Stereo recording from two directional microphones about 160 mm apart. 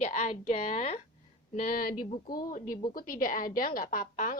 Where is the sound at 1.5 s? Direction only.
55° left (ahead or behind).